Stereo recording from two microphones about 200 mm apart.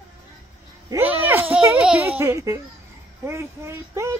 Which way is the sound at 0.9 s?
10° right (ahead or behind).